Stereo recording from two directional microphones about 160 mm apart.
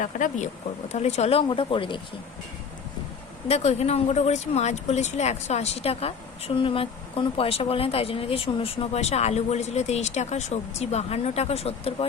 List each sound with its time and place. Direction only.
0.0 s speech: 50° left (ahead or behind); by 2.0 s 35° left (ahead or behind)
3.5 s speech: 40° left (ahead or behind)